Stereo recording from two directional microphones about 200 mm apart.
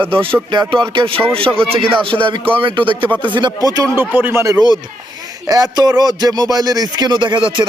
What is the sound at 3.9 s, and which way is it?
A man's voice, 10° right (ahead or behind).